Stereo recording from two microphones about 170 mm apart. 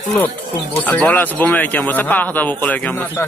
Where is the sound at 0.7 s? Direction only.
10° left (ahead or behind).